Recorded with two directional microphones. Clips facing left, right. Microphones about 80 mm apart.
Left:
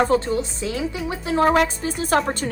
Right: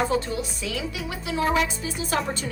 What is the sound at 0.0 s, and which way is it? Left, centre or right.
A woman's voice, left.